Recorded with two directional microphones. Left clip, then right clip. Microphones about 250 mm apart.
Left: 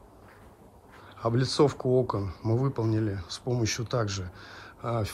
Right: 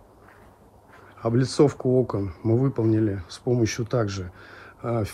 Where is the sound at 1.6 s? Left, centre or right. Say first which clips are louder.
Right 4 dB; left.